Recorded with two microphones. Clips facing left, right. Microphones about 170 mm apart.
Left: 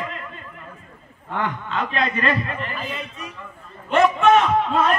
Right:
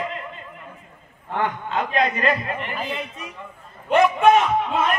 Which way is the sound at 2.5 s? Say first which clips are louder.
Right 2 dB; 20° right (ahead or behind).